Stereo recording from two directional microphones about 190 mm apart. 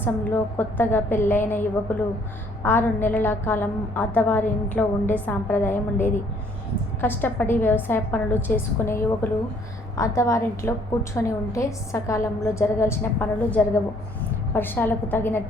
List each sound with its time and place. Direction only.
0.0 s a woman's voice: 10° left (ahead or behind)
2.6 s a woman's voice: 10° left (ahead or behind)
10.2 s a woman's voice: 15° left (ahead or behind)